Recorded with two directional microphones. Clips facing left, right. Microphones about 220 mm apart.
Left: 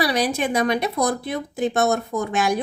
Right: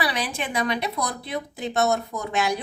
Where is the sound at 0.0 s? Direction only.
40° left (ahead or behind).